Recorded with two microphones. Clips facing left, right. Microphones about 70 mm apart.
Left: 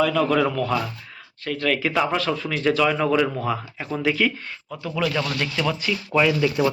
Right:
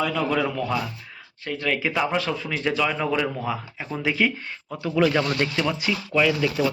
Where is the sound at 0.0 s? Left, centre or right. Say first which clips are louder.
Left 4 dB; centre.